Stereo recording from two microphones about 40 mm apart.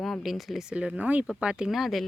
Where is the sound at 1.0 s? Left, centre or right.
Right.